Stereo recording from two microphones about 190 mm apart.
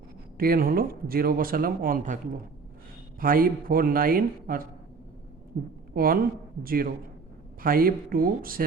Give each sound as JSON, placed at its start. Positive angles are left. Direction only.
{"t": 0.3, "sound": "a man's voice", "side_deg": -50}
{"t": 3.2, "sound": "a man's voice", "side_deg": -50}